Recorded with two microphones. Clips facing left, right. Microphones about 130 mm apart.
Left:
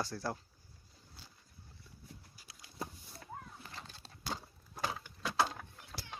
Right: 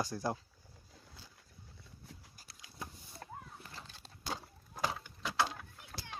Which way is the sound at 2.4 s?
45° right (ahead or behind).